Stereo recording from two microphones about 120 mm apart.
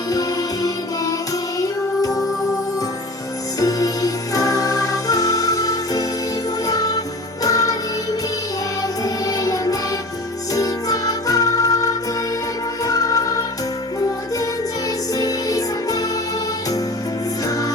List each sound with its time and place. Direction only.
0.1 s music: 30° left (ahead or behind)
3.6 s music: 30° left (ahead or behind)
9.0 s music: 30° left (ahead or behind)
15.1 s music: 30° left (ahead or behind)